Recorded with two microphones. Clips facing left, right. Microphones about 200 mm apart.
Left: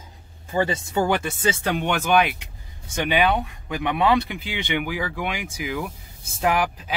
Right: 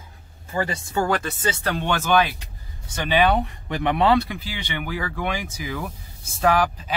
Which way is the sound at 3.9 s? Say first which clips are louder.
Right 1 dB; 15° left (ahead or behind).